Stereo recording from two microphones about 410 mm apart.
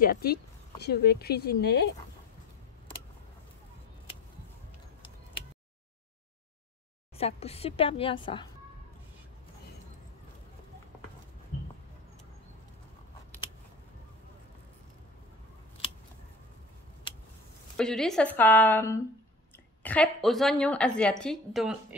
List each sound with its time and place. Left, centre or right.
0.0 s speech: left
7.2 s a woman's voice: centre
17.7 s a woman's voice: centre